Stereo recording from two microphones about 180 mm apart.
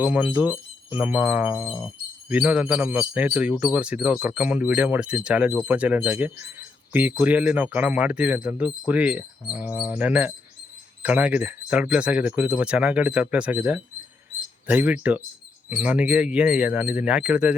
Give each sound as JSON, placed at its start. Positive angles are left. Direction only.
{"t": 0.0, "sound": "speech", "side_deg": -10}